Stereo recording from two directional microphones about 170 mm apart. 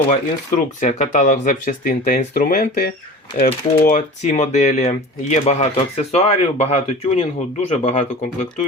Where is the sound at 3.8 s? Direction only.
45° left (ahead or behind).